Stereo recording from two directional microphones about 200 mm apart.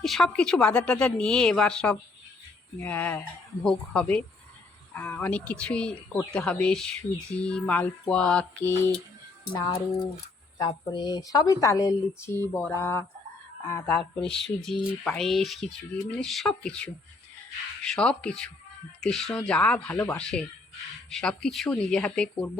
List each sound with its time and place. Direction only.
0.0 s speech: centre (ahead or behind)
9.5 s speech: 25° left (ahead or behind)
14.0 s speech: 5° left (ahead or behind)